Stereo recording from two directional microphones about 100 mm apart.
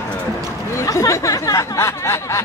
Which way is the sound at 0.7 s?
35° left (ahead or behind).